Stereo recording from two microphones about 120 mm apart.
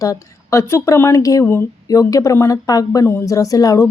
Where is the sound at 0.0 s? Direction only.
25° left (ahead or behind).